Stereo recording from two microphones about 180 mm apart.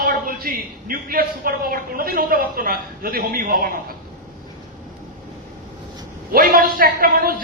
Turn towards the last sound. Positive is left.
turn(degrees=-55)  # may be behind; listen again after turning